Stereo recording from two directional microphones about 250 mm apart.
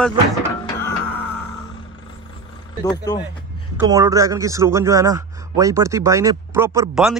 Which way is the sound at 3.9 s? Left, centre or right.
Centre.